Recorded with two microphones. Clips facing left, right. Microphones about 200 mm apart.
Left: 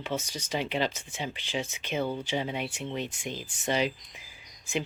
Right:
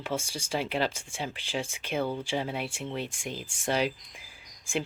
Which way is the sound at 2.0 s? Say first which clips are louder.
Even; 5° left (ahead or behind).